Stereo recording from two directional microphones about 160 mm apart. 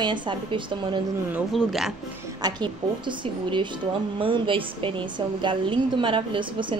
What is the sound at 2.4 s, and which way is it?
A woman's voice, 30° right (ahead or behind).